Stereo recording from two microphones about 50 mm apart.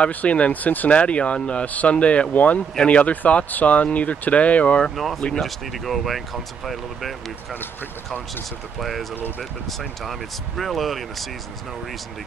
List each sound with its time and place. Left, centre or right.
0.0 s speech: left
4.9 s speech: centre
8.7 s speech: centre
10.0 s speech: centre